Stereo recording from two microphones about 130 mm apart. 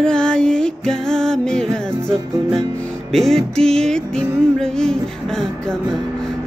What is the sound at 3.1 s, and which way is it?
Music, centre (ahead or behind).